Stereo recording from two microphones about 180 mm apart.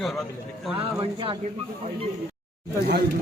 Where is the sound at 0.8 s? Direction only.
30° right (ahead or behind).